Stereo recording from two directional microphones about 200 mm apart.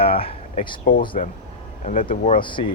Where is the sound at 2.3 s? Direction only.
25° left (ahead or behind).